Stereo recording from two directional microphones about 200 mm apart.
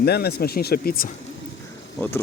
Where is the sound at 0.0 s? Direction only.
50° left (ahead or behind).